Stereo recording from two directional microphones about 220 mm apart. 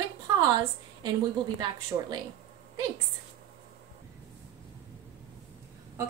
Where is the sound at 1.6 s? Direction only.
20° right (ahead or behind).